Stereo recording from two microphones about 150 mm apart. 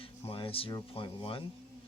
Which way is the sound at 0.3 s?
40° left (ahead or behind).